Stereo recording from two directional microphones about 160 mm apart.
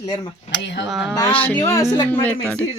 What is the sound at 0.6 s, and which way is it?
Speech, 90° left.